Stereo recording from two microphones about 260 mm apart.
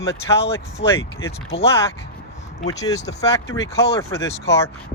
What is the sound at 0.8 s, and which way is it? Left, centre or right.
Speech, left.